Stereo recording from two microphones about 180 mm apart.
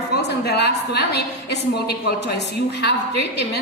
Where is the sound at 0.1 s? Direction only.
65° left (ahead or behind).